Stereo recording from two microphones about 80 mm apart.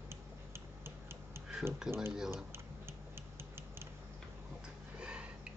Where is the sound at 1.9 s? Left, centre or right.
Centre.